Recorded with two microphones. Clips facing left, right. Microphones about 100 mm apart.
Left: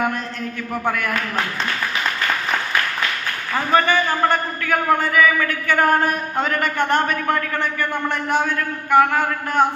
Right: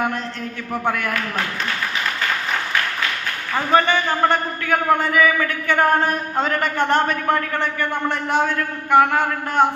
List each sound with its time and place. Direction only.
0.7 s a man's voice: 25° right (ahead or behind)
3.5 s a man's voice: 25° right (ahead or behind)